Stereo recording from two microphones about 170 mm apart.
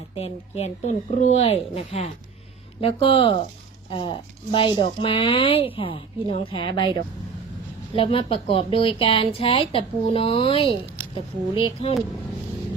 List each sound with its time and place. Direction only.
0.2 s speech: 40° left (ahead or behind)
7.9 s speech: 30° left (ahead or behind)